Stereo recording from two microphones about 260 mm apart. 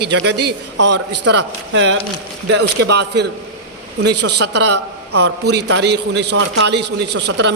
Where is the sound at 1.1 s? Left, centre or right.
Right.